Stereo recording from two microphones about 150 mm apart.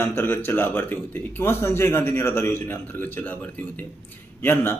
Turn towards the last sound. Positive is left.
turn(degrees=15)  # may be behind; listen again after turning